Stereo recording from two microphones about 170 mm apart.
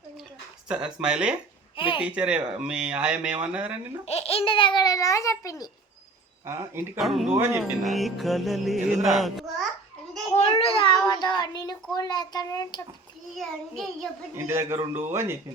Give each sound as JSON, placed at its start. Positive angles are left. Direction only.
{"t": 0.7, "sound": "music", "side_deg": -5}
{"t": 1.7, "sound": "speech", "side_deg": 30}
{"t": 2.0, "sound": "speech", "side_deg": -5}
{"t": 4.0, "sound": "a child's voice", "side_deg": 40}
{"t": 6.4, "sound": "speech", "side_deg": -15}
{"t": 7.0, "sound": "music", "side_deg": 0}
{"t": 9.0, "sound": "a child's voice", "side_deg": 0}
{"t": 10.3, "sound": "a sound", "side_deg": 35}
{"t": 13.3, "sound": "music", "side_deg": 0}
{"t": 14.3, "sound": "speech", "side_deg": -15}